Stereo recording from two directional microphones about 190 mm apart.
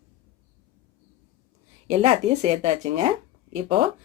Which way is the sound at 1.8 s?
35° right (ahead or behind).